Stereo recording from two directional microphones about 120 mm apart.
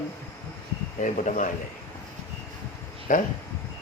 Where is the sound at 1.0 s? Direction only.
85° left.